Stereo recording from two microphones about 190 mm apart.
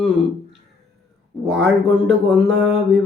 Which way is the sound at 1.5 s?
5° right (ahead or behind).